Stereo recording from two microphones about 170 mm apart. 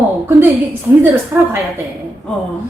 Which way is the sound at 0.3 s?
10° right (ahead or behind).